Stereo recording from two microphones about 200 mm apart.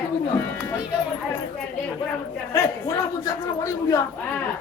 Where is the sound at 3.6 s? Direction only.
15° left (ahead or behind).